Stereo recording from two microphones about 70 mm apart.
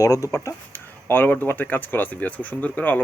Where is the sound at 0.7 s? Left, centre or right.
Left.